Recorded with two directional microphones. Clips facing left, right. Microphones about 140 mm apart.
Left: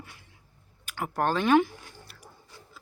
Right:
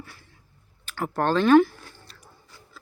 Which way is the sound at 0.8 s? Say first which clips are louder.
Right 3 dB; 10° left (ahead or behind).